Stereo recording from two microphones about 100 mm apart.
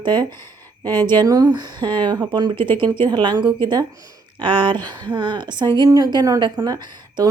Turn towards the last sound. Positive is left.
turn(degrees=-45)  # may be behind; listen again after turning